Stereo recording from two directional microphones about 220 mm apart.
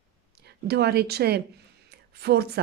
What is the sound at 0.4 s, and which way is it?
Speech, 50° right (ahead or behind).